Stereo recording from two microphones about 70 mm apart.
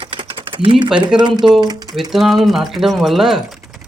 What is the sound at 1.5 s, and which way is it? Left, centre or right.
Speech, right.